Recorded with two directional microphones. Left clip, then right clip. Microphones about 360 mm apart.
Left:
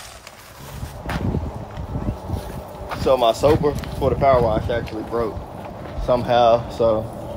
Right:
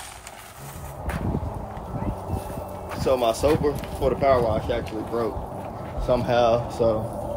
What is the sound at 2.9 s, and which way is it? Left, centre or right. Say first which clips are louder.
Speech: left 5 dB; centre.